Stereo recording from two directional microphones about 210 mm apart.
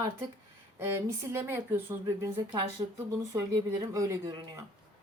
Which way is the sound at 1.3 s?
10° right (ahead or behind).